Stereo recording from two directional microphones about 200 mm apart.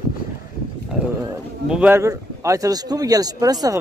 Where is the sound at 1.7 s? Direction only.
10° right (ahead or behind).